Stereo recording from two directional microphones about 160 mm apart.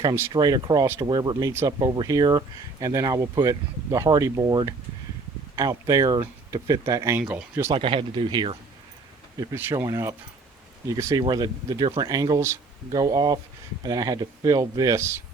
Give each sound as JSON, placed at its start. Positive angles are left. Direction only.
{"t": 0.0, "sound": "speech", "side_deg": -20}
{"t": 7.2, "sound": "speech", "side_deg": -10}
{"t": 7.7, "sound": "speech", "side_deg": -35}
{"t": 9.4, "sound": "speech", "side_deg": -15}